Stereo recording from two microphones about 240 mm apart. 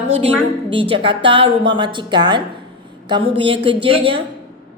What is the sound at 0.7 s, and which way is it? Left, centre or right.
A woman's voice, right.